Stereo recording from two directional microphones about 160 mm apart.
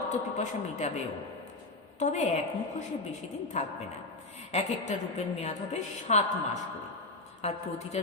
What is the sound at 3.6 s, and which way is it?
A woman's voice, 45° left (ahead or behind).